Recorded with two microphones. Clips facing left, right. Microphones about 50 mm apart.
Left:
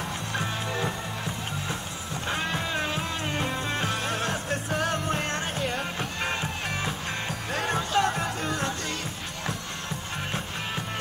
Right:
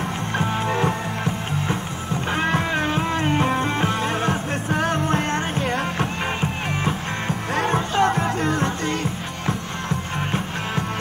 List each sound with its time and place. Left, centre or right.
0.3 s music: right
2.2 s music: right
7.5 s music: right